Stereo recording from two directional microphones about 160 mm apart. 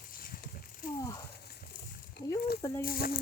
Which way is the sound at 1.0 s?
20° left (ahead or behind).